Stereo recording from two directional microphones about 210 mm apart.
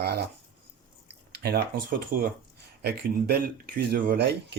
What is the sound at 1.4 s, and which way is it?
Speech, 50° right (ahead or behind).